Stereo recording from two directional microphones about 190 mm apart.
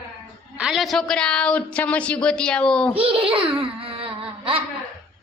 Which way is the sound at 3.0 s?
30° right (ahead or behind).